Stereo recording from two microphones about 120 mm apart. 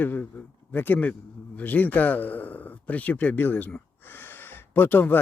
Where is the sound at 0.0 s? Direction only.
15° left (ahead or behind).